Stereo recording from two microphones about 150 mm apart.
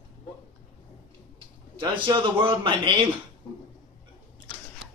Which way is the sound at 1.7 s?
30° right (ahead or behind).